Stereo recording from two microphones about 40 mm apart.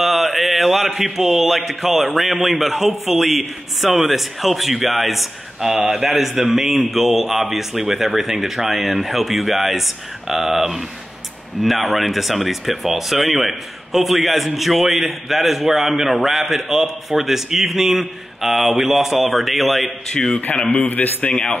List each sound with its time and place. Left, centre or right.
0.0 s mantra: centre
0.8 s speech: centre
20.1 s a man's voice: centre
20.6 s a man's voice: left